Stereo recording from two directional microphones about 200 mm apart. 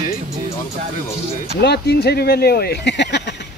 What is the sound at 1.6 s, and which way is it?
Speech, 55° left (ahead or behind).